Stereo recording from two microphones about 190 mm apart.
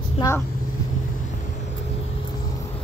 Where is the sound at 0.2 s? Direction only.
30° left (ahead or behind).